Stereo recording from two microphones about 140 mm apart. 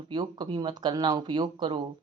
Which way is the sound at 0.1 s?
35° right (ahead or behind).